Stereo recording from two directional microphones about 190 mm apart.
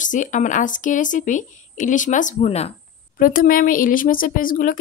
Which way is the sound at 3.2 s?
50° left (ahead or behind).